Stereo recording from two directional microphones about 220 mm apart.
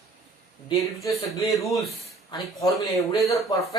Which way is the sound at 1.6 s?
Centre (ahead or behind).